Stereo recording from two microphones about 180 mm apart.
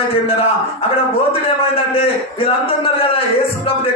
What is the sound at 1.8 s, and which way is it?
A man's voice, 30° left (ahead or behind).